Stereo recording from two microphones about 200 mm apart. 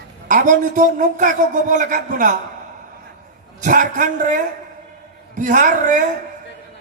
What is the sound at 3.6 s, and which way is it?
A woman's voice, 40° right (ahead or behind).